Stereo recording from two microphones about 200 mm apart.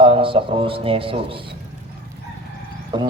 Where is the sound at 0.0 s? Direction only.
25° right (ahead or behind).